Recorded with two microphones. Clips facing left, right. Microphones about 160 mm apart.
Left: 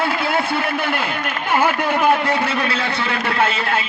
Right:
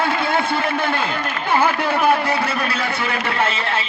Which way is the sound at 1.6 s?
15° left (ahead or behind).